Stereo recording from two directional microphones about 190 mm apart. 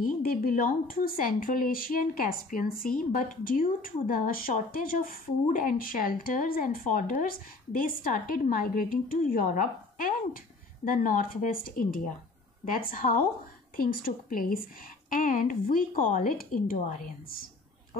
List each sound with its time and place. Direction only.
0.0 s speech: 50° left (ahead or behind)